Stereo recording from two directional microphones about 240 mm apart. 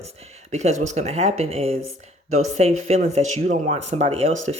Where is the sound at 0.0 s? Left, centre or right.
Right.